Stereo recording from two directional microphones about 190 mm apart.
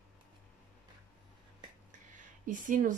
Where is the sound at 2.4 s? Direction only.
45° right (ahead or behind).